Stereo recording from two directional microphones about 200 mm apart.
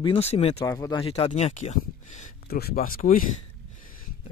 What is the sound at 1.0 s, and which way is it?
Speech, 30° left (ahead or behind).